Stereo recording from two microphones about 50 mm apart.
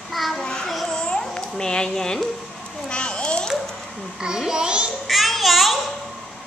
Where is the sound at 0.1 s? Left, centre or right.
Centre.